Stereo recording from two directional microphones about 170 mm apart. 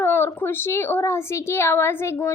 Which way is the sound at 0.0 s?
15° left (ahead or behind).